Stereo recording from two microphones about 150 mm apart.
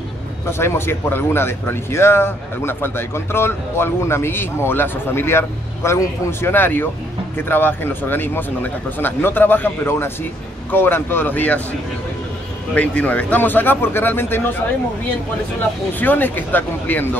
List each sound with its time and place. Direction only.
0.5 s speech: 15° left (ahead or behind)
12.7 s speech: 10° left (ahead or behind)
15.9 s speech: 10° left (ahead or behind)